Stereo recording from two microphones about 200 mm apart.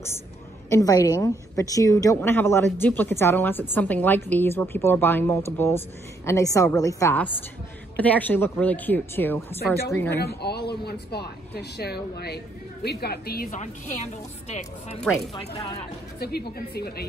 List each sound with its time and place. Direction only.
0.7 s a woman's voice: 15° left (ahead or behind)
10.2 s speech: 55° left (ahead or behind)
14.5 s speech: 35° left (ahead or behind)
16.2 s speech: 50° left (ahead or behind)